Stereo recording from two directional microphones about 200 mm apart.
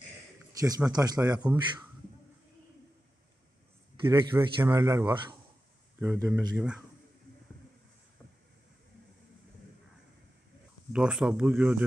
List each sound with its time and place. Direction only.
0.5 s a man's voice: 15° right (ahead or behind)
1.4 s speech: 10° right (ahead or behind)
4.4 s speech: 15° right (ahead or behind)
5.9 s speech: 5° right (ahead or behind)
10.9 s speech: 5° right (ahead or behind)